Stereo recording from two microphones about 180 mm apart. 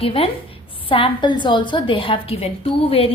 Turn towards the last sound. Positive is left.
turn(degrees=30)  # may be behind; listen again after turning